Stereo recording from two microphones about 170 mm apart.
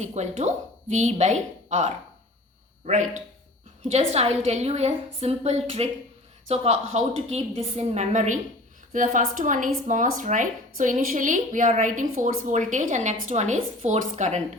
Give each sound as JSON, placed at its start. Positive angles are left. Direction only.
{"t": 0.0, "sound": "a woman's voice", "side_deg": -40}